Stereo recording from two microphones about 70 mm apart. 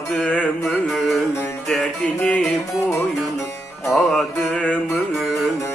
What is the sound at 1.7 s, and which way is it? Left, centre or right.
Music, centre.